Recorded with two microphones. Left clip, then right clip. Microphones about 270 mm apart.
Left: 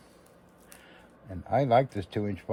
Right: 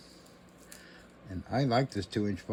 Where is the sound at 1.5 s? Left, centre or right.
Centre.